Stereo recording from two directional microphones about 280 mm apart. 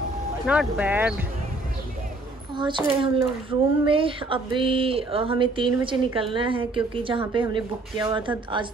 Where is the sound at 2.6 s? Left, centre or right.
Centre.